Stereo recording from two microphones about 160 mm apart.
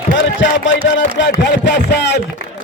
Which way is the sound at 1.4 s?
90° left.